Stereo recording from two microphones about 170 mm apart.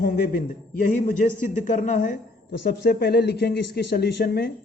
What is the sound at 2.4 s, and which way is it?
Speech, 75° left (ahead or behind).